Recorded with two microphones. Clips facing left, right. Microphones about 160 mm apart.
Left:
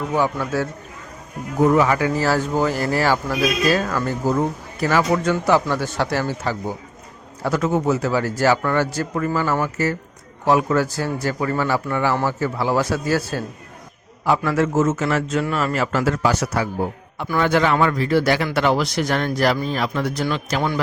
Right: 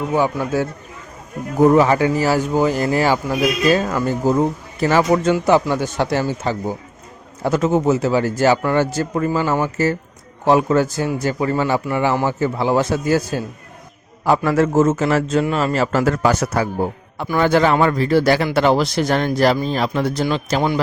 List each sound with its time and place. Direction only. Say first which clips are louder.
0.1 s a man's voice: right 2 dB; 15° right (ahead or behind)
1.6 s a man's voice: right 4 dB; 30° right (ahead or behind)
2.1 s speech: right 3 dB; 15° right (ahead or behind)
14.3 s a man's voice: right 3 dB; 40° right (ahead or behind)
17.2 s a man's voice: right 3 dB; 30° right (ahead or behind)